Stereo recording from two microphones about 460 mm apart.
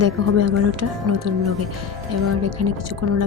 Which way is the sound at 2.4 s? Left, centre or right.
Right.